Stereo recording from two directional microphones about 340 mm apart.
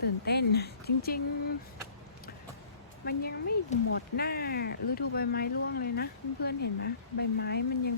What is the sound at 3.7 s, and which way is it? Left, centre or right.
Speech, centre.